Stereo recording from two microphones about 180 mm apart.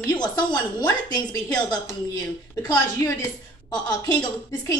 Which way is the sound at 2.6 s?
20° left (ahead or behind).